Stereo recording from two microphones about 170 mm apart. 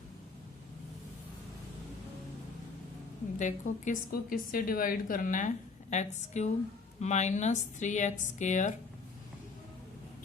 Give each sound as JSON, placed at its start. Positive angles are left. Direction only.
{"t": 3.3, "sound": "a woman's voice", "side_deg": 45}